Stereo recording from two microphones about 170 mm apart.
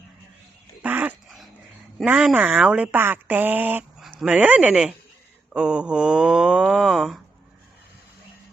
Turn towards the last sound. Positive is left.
turn(degrees=0)  # may be behind; listen again after turning